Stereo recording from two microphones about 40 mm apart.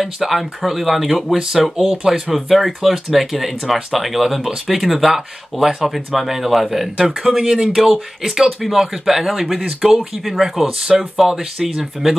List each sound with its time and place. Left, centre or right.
0.0 s speech: centre